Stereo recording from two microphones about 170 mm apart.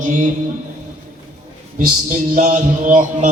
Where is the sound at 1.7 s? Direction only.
50° right (ahead or behind).